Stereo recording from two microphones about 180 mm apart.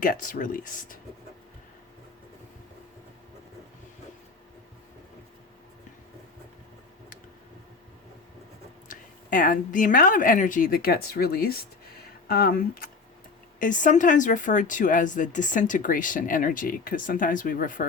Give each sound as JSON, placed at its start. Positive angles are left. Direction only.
{"t": 0.0, "sound": "speech", "side_deg": 50}
{"t": 8.9, "sound": "speech", "side_deg": 50}
{"t": 13.6, "sound": "speech", "side_deg": 45}